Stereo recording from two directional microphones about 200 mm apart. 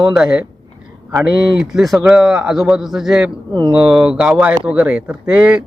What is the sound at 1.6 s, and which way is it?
Speech, centre (ahead or behind).